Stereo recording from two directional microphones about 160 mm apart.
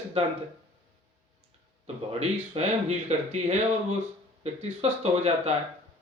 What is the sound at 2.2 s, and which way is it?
Speech, 45° right (ahead or behind).